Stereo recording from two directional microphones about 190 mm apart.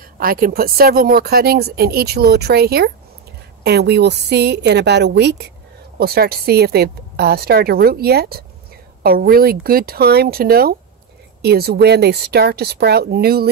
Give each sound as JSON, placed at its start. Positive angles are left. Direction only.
{"t": 0.2, "sound": "a woman's voice", "side_deg": -50}